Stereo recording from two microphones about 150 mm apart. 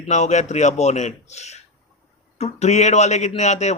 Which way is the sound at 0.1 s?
50° left (ahead or behind).